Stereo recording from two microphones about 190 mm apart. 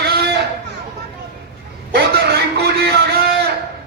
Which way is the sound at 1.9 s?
60° right (ahead or behind).